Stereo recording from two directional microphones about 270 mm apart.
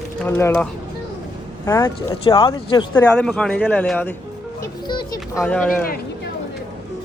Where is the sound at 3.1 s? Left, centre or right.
Centre.